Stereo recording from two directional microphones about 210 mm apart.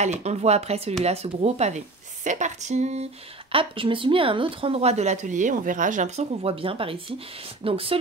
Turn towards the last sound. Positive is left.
turn(degrees=-25)  # may be behind; listen again after turning